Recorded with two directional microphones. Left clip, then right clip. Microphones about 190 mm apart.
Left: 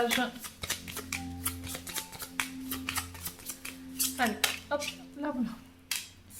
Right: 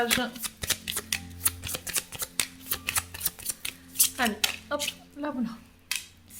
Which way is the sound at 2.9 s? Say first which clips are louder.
Right 6 dB; 40° right (ahead or behind).